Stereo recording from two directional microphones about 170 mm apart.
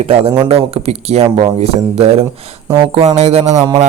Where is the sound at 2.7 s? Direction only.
25° right (ahead or behind).